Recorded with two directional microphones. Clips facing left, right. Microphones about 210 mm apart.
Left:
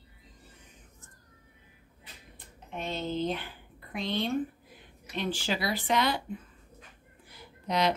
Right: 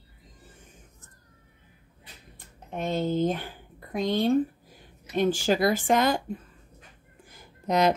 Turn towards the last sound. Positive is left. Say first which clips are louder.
# right 5 dB
turn(degrees=-45)  # may be behind; listen again after turning